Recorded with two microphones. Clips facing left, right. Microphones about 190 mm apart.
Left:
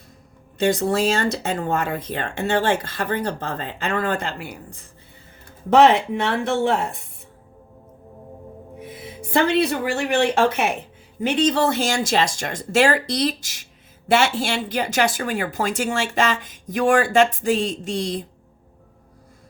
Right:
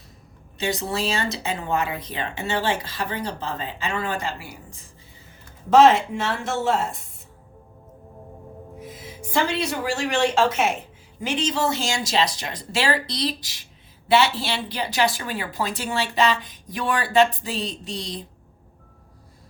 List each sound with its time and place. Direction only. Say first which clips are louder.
0.6 s speech: left 7 dB; 50° left (ahead or behind)
8.8 s a woman's voice: left 4 dB; 60° left (ahead or behind)